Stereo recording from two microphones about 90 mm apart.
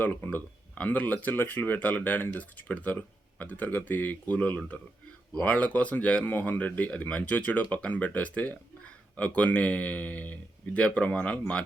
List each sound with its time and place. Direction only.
0.0 s speech: 20° left (ahead or behind)